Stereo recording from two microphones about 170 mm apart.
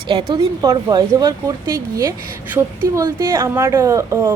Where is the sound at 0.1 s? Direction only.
35° right (ahead or behind).